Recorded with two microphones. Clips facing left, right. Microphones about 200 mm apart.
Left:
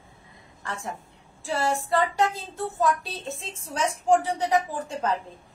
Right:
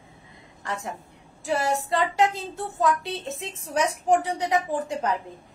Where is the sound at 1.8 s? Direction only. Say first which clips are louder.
Right 1 dB; 20° right (ahead or behind).